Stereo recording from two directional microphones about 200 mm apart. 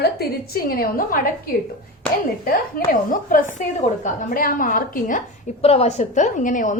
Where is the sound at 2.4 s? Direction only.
45° left (ahead or behind).